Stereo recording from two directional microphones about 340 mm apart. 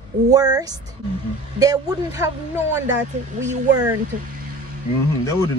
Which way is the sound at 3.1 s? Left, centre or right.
Right.